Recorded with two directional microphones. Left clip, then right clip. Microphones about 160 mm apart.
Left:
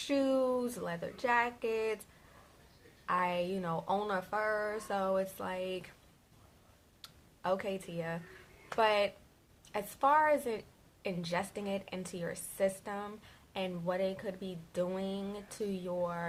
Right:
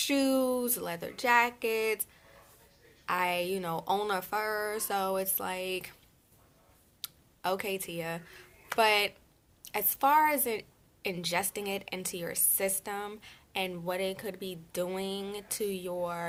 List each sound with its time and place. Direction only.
0.0 s speech: 15° right (ahead or behind)
3.1 s speech: 20° right (ahead or behind)
7.0 s a woman's voice: 20° right (ahead or behind)